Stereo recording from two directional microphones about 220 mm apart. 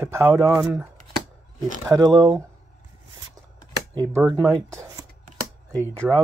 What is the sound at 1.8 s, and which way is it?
Speech, 15° right (ahead or behind).